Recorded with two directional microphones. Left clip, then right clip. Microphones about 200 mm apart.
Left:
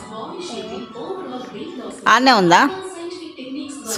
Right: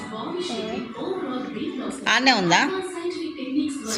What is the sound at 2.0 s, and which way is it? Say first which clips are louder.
Speech: left 7 dB; 30° left (ahead or behind).